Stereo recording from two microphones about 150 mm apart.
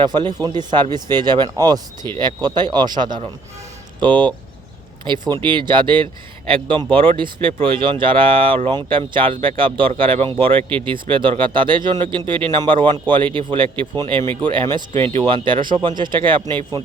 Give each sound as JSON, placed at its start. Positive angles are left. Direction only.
{"t": 0.0, "sound": "speech", "side_deg": -30}
{"t": 10.6, "sound": "speech", "side_deg": 10}
{"t": 10.8, "sound": "speech", "side_deg": -35}